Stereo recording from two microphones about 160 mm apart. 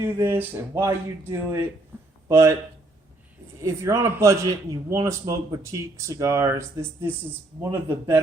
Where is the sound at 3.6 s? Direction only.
20° right (ahead or behind).